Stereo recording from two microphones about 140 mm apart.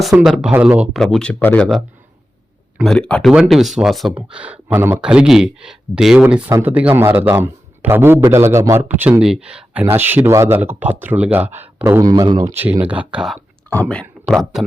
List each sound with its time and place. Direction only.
0.2 s speech: 5° right (ahead or behind)
0.9 s speech: 5° left (ahead or behind)
13.7 s speech: 10° left (ahead or behind)